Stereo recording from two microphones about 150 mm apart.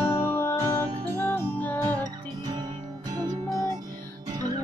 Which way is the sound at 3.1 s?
25° right (ahead or behind).